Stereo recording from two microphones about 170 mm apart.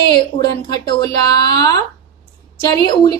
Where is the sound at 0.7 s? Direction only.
25° left (ahead or behind).